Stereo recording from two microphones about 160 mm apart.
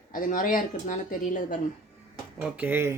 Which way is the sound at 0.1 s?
60° left (ahead or behind).